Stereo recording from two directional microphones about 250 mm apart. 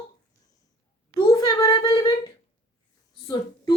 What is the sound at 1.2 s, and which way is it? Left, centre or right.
A woman's voice, centre.